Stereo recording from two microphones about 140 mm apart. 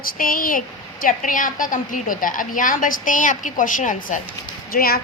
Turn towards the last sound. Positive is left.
turn(degrees=90)